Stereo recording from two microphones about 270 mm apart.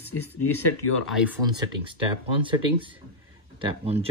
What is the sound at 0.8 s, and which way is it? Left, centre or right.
Speech, left.